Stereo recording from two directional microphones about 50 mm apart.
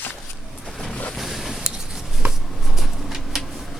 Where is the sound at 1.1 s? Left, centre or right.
Centre.